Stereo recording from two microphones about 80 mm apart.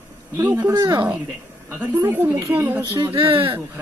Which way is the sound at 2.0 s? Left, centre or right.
Right.